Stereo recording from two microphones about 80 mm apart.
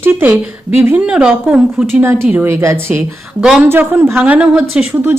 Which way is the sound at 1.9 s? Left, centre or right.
Right.